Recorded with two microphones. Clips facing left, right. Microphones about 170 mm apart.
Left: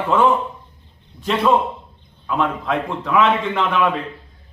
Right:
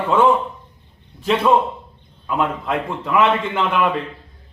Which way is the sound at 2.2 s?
5° right (ahead or behind).